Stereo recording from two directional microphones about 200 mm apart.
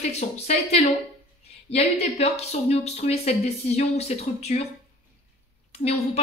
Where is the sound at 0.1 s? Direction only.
30° left (ahead or behind).